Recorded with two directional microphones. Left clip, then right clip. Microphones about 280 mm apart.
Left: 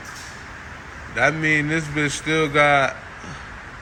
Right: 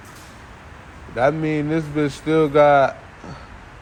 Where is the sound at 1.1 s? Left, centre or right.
Centre.